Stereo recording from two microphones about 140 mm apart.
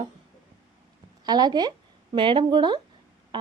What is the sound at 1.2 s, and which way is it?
A woman's voice, 30° right (ahead or behind).